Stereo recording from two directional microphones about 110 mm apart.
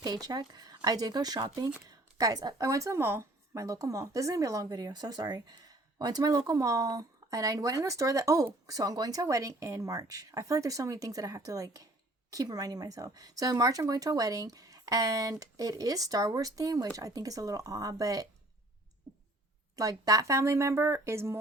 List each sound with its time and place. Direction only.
0.0 s a woman's voice: 35° right (ahead or behind)
19.7 s speech: 35° right (ahead or behind)